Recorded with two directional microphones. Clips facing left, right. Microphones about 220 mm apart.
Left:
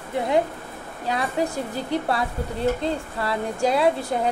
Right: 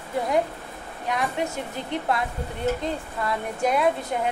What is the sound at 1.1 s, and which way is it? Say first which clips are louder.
A woman's voice: left 2 dB; 35° left (ahead or behind).